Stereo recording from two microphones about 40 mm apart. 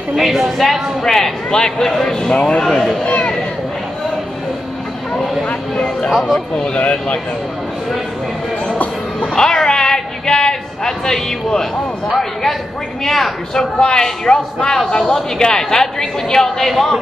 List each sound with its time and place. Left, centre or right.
0.1 s a woman's voice: centre
1.0 s a woman's voice: centre
2.3 s speech: left
6.0 s a woman's voice: centre
6.5 s speech: left
6.8 s speech: left
8.6 s music: left
9.3 s a sound: centre
12.1 s a woman's voice: centre
13.7 s a woman's voice: centre